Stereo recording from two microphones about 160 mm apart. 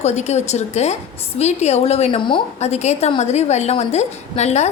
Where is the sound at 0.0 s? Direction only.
45° left (ahead or behind).